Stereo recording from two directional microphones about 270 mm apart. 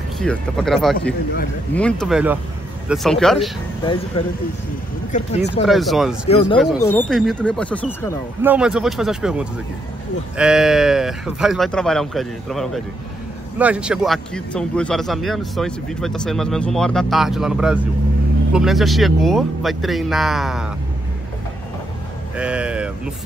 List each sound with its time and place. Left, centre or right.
0.2 s speech: centre
5.1 s speech: left
5.7 s speech: centre
6.2 s speech: left
6.8 s speech: centre
8.4 s speech: centre
22.4 s speech: centre